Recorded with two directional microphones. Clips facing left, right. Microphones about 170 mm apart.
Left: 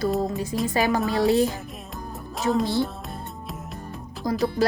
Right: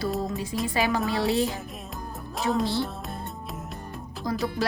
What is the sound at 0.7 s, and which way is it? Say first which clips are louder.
Speech: left 2 dB; 40° left (ahead or behind).